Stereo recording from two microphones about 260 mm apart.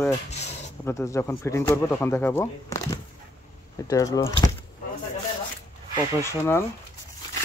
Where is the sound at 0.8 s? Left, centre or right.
Centre.